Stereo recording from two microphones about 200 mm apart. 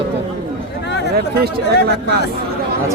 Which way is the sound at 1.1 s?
50° right (ahead or behind).